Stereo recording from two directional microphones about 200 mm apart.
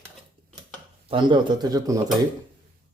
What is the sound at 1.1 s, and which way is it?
Speech, 20° right (ahead or behind).